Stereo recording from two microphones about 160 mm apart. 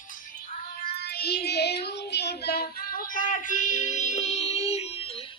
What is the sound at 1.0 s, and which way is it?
Child singing, 80° left.